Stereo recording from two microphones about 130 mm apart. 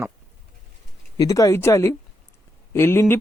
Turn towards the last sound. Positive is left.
turn(degrees=15)  # may be behind; listen again after turning